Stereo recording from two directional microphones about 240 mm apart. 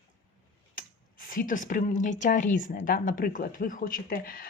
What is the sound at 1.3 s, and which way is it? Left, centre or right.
A woman's voice, left.